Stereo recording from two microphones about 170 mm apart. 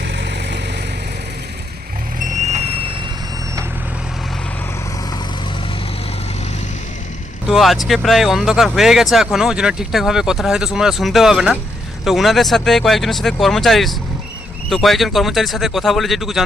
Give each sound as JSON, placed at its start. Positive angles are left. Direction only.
{"t": 0.0, "sound": "vehicle", "side_deg": -90}
{"t": 2.1, "sound": "vehicle", "side_deg": -45}
{"t": 7.4, "sound": "speech", "side_deg": 0}